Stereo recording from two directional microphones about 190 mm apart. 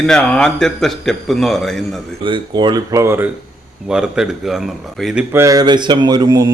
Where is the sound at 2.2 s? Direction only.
25° right (ahead or behind); by 5.2 s centre (ahead or behind).